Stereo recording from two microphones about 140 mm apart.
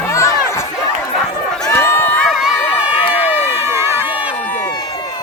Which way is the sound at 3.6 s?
15° right (ahead or behind).